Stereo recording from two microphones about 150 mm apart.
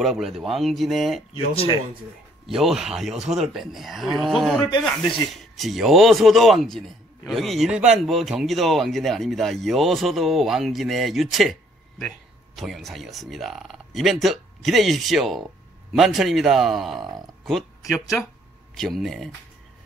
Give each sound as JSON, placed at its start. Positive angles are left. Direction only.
{"t": 0.0, "sound": "speech", "side_deg": 0}
{"t": 1.3, "sound": "speech", "side_deg": 40}
{"t": 2.4, "sound": "speech", "side_deg": 0}
{"t": 12.5, "sound": "a man's voice", "side_deg": 0}